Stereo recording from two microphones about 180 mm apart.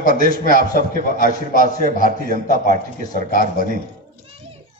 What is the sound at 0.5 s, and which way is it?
Speech, 50° right (ahead or behind).